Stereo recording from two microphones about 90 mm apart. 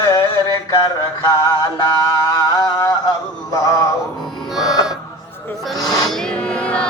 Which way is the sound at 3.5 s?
40° left (ahead or behind).